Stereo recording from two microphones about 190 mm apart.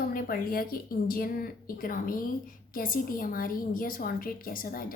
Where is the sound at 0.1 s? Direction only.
50° left (ahead or behind).